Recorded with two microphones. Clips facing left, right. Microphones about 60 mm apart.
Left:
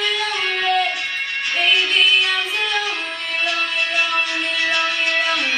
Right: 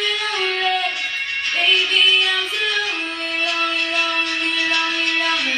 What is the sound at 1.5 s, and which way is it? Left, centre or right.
Music, centre.